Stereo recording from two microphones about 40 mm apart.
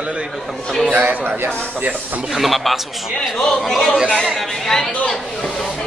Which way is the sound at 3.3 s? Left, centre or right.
Centre.